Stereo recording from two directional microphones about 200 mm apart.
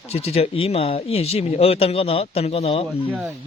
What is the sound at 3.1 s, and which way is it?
Speech, 5° right (ahead or behind).